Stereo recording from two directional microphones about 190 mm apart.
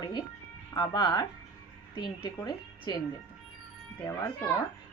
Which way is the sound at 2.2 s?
20° left (ahead or behind).